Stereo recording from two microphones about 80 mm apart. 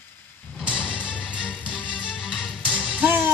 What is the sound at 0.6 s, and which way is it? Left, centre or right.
Music, centre.